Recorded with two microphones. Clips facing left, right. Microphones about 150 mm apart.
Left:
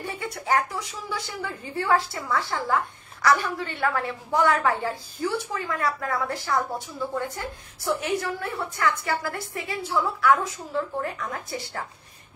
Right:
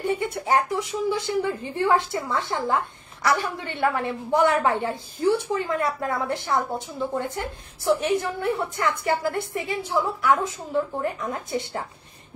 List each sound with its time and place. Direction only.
0.0 s a woman's voice: 25° right (ahead or behind)